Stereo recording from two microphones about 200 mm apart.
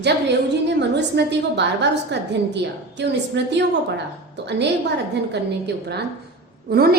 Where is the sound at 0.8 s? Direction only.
60° right (ahead or behind).